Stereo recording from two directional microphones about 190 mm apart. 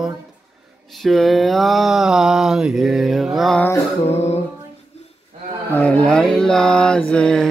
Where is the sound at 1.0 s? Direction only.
Centre (ahead or behind).